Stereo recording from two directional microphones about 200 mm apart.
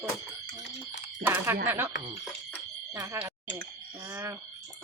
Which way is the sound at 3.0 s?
15° right (ahead or behind).